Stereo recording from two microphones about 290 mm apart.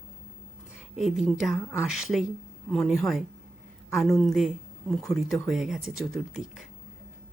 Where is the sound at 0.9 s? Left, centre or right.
Centre.